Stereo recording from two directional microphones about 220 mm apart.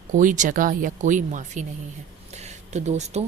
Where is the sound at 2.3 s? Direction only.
30° right (ahead or behind).